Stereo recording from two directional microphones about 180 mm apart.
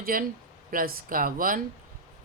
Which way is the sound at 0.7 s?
55° right (ahead or behind).